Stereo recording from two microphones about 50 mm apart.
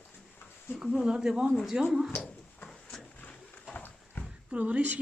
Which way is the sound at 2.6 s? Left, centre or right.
Centre.